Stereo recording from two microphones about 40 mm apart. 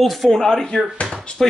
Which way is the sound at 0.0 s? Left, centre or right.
Centre.